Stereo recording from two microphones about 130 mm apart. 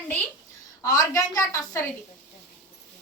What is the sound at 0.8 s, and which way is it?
A woman's voice, 25° left (ahead or behind).